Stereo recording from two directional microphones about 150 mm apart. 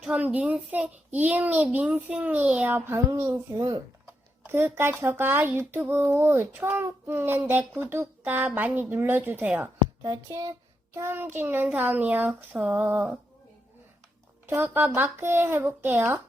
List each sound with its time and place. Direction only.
0.0 s speech: 5° right (ahead or behind)
10.0 s speech: 25° right (ahead or behind)
14.4 s speech: 15° right (ahead or behind)